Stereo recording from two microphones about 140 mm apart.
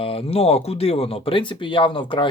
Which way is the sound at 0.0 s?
45° left (ahead or behind).